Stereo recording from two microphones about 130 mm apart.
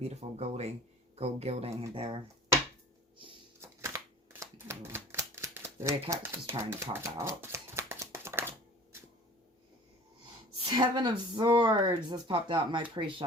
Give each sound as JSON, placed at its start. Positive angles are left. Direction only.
{"t": 0.0, "sound": "speech", "side_deg": -55}
{"t": 3.6, "sound": "shuffling cards", "side_deg": -20}
{"t": 10.6, "sound": "speech", "side_deg": -35}